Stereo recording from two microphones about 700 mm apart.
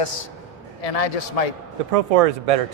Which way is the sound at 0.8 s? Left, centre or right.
Left.